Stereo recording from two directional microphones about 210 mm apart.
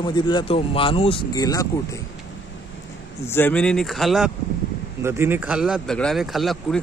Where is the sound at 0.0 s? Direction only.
20° left (ahead or behind).